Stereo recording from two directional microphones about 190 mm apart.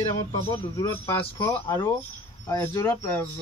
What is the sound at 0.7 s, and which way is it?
A man's voice, 20° left (ahead or behind).